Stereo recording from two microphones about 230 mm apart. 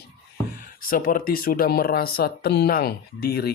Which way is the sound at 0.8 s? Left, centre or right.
Left.